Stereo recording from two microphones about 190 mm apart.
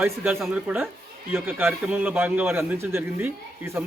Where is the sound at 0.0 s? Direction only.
5° right (ahead or behind).